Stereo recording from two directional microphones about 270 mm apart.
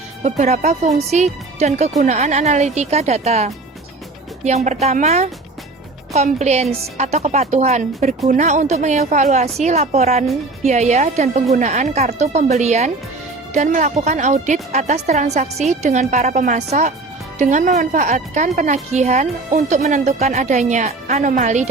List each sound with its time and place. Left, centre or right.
0.2 s a woman's voice: right